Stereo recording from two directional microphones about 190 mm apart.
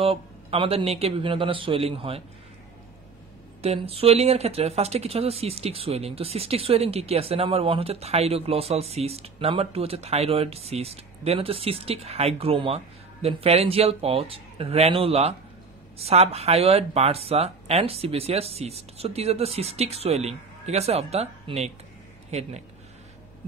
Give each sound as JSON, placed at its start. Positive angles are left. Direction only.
{"t": 0.0, "sound": "a man's voice", "side_deg": -30}
{"t": 3.6, "sound": "speech", "side_deg": -30}